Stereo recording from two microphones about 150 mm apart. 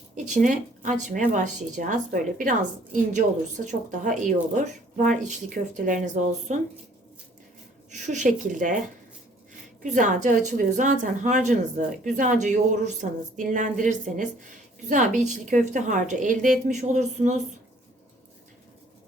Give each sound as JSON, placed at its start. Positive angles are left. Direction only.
{"t": 0.4, "sound": "a woman's voice", "side_deg": -60}
{"t": 7.9, "sound": "a woman's voice", "side_deg": -55}
{"t": 9.8, "sound": "a woman's voice", "side_deg": -55}